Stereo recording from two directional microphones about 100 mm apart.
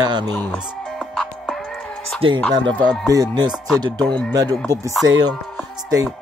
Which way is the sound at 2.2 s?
65° right (ahead or behind).